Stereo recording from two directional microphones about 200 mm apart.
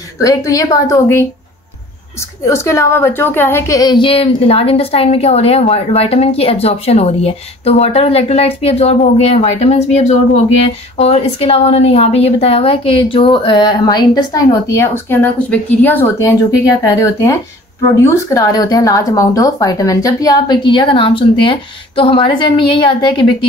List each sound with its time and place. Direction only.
0.2 s a woman's voice: 15° left (ahead or behind)
2.4 s a woman's voice: 15° left (ahead or behind)